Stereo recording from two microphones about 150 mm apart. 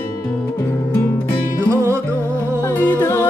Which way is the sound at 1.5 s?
20° right (ahead or behind).